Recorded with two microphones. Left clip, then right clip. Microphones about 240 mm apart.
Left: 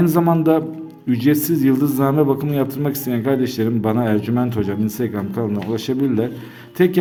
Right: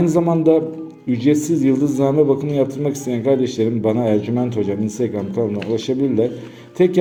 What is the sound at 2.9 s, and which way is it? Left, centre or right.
Speech, left.